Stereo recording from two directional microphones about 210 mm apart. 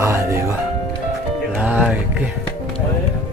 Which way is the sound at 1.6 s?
5° right (ahead or behind).